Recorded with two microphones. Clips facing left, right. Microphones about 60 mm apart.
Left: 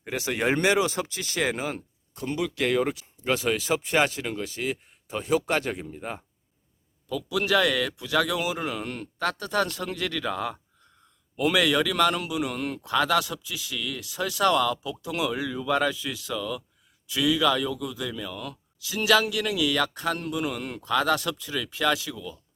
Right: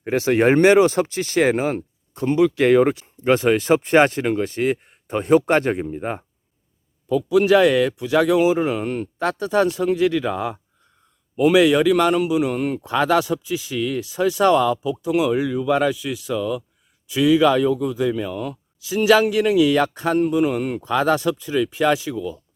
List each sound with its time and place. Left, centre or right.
0.0 s speech: right
7.1 s a man's voice: right